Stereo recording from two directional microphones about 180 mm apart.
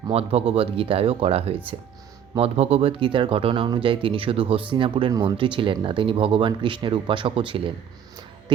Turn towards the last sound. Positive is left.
turn(degrees=-30)  # may be behind; listen again after turning